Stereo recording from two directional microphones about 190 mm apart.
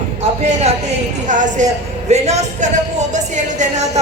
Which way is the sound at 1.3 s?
40° right (ahead or behind).